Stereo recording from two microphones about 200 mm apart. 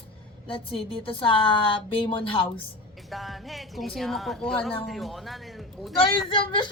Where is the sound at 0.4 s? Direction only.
25° left (ahead or behind).